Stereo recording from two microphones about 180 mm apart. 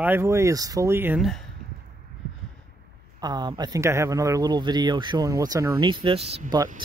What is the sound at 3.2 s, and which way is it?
Speech, 25° right (ahead or behind).